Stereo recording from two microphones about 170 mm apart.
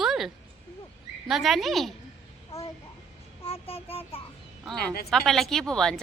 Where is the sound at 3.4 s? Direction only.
35° left (ahead or behind).